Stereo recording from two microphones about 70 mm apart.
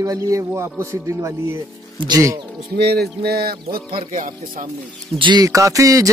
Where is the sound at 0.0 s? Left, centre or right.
Right.